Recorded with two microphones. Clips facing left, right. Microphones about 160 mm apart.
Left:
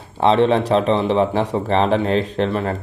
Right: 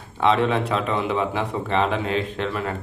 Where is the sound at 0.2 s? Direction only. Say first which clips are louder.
Left 5 dB; 30° left (ahead or behind).